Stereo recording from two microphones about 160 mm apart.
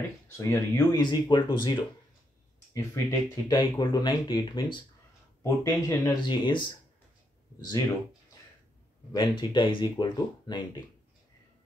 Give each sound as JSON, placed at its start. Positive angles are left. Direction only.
{"t": 0.4, "sound": "speech", "side_deg": 20}
{"t": 1.0, "sound": "speech", "side_deg": 30}
{"t": 5.4, "sound": "speech", "side_deg": 15}
{"t": 6.2, "sound": "speech", "side_deg": 30}
{"t": 9.1, "sound": "speech", "side_deg": 30}